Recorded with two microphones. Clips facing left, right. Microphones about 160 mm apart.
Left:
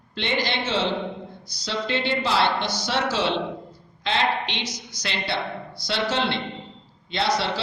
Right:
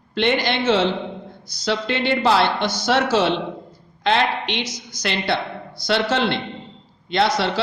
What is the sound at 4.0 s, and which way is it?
Speech, 60° right (ahead or behind).